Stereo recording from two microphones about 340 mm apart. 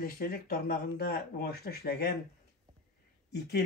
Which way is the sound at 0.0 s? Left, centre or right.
Left.